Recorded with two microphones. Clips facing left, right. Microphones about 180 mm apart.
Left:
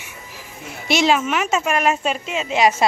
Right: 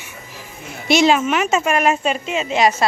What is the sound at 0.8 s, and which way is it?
A woman's voice, centre (ahead or behind).